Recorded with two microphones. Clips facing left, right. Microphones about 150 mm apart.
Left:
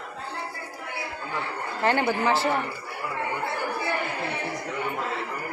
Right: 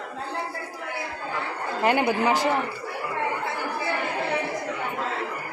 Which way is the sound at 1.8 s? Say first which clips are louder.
Right 2 dB; 15° right (ahead or behind).